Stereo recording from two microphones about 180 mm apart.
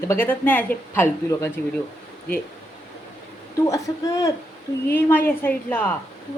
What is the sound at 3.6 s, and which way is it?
A woman's voice, 20° left (ahead or behind).